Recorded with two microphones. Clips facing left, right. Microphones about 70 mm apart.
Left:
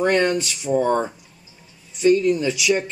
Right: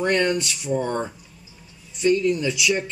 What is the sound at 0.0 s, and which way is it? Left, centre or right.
Speech, centre.